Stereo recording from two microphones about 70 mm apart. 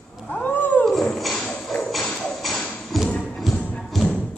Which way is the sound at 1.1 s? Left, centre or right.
Centre.